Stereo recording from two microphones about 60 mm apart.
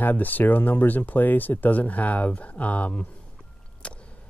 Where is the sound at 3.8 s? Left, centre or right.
Centre.